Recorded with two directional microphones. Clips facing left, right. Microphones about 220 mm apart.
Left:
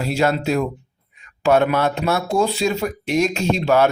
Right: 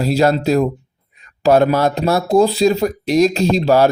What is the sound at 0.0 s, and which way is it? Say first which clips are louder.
Speech: right 5 dB; 35° right (ahead or behind).